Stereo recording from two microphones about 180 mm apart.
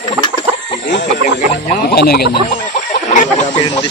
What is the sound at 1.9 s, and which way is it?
Speech, 60° left (ahead or behind).